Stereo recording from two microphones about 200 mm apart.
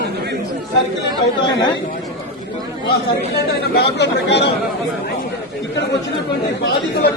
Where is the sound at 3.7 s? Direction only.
60° left (ahead or behind).